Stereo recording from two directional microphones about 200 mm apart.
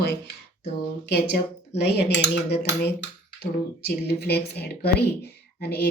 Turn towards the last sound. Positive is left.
turn(degrees=55)  # may be behind; listen again after turning